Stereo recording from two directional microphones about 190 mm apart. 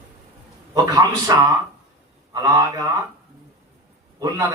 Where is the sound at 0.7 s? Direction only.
20° right (ahead or behind).